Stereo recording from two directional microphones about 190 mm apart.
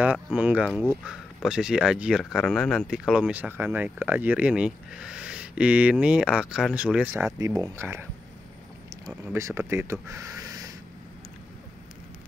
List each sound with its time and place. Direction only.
0.0 s speech: 5° right (ahead or behind)
7.3 s speech: 20° right (ahead or behind)
9.1 s speech: 10° right (ahead or behind)